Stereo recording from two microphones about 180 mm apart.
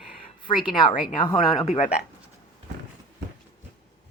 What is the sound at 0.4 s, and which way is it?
Speech, 25° left (ahead or behind).